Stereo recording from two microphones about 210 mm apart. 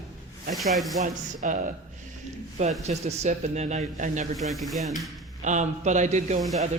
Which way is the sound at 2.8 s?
30° right (ahead or behind).